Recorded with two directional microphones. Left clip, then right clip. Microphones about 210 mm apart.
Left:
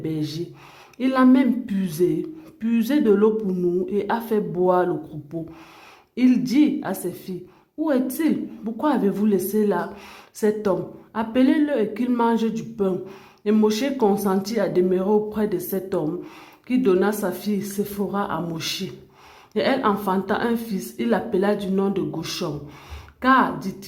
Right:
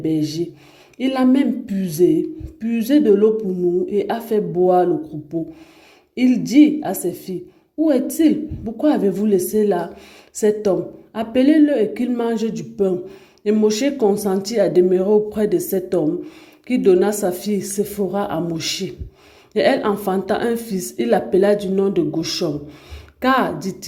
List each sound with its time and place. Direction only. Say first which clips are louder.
0.0 s speech: right 7 dB; 5° right (ahead or behind)
3.8 s speech: right 3 dB; 5° right (ahead or behind)
6.1 s speech: right 5 dB; 5° right (ahead or behind)